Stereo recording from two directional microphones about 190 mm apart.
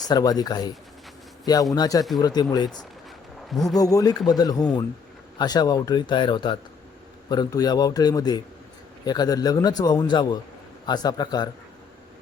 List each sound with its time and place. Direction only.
0.0 s a man's voice: 20° left (ahead or behind)
1.7 s a man's voice: 20° left (ahead or behind)
3.5 s speech: centre (ahead or behind)
3.8 s a man's voice: 20° left (ahead or behind)